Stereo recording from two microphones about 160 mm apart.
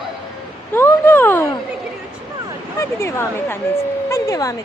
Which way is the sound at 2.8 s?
15° left (ahead or behind).